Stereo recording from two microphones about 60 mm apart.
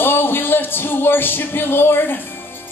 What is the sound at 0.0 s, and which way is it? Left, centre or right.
Music, left.